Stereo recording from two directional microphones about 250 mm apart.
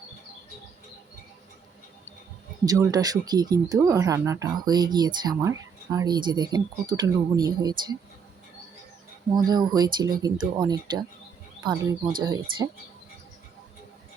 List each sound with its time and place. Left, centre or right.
2.6 s speech: centre
9.3 s speech: centre